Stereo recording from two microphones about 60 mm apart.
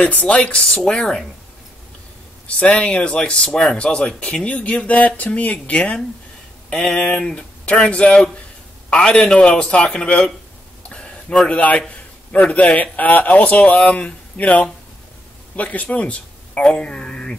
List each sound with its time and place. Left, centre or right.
0.1 s speech: left
0.5 s speech: centre
2.4 s speech: left
10.8 s a sound: centre
11.4 s a man's voice: left